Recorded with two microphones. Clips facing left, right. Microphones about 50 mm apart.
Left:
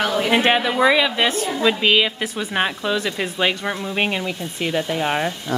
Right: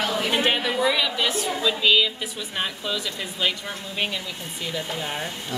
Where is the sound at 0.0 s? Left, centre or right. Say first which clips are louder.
Left 5 dB; left.